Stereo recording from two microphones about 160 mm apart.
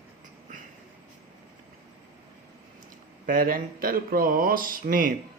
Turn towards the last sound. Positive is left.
turn(degrees=-60)  # may be behind; listen again after turning